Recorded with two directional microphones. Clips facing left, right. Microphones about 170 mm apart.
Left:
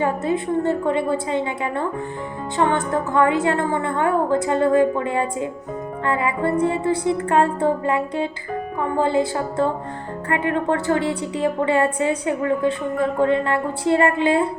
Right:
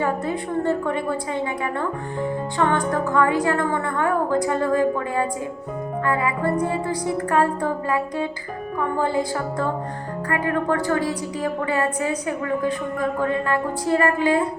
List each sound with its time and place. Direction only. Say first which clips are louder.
0.0 s a woman's voice: left 3 dB; 20° left (ahead or behind)
2.6 s a woman's voice: left 2 dB; 20° left (ahead or behind)